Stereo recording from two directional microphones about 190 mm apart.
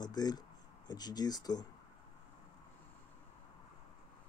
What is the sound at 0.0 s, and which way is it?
Speech, 20° left (ahead or behind).